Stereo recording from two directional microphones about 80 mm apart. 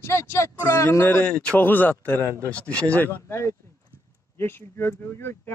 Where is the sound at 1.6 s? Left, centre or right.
Left.